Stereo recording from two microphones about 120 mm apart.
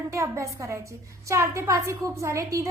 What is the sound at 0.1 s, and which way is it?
A woman's voice, 25° right (ahead or behind).